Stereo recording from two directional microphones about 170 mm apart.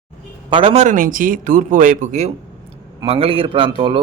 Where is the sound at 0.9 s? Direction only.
55° right (ahead or behind).